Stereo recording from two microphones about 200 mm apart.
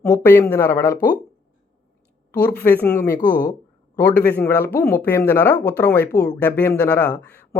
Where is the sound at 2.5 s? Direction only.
10° left (ahead or behind).